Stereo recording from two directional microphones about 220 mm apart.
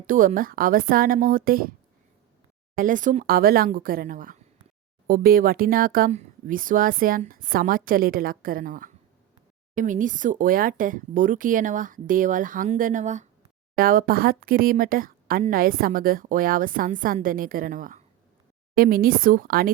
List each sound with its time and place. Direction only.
0.1 s speech: 40° right (ahead or behind)
2.7 s speech: 35° right (ahead or behind)